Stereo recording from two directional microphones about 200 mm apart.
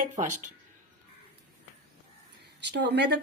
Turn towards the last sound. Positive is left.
turn(degrees=-60)  # may be behind; listen again after turning